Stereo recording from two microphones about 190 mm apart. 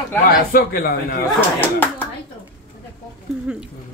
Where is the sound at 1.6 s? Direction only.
10° left (ahead or behind).